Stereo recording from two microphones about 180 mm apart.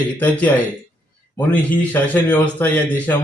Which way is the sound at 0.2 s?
10° left (ahead or behind).